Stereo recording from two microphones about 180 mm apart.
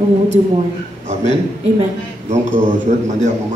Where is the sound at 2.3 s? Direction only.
40° right (ahead or behind).